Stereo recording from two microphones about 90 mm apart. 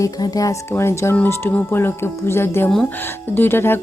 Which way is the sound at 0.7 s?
30° left (ahead or behind).